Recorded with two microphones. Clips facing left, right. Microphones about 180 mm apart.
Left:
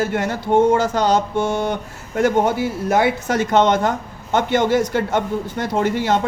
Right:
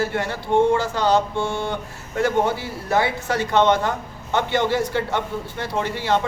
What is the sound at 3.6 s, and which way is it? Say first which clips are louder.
A man's voice: left 2 dB; 45° left (ahead or behind).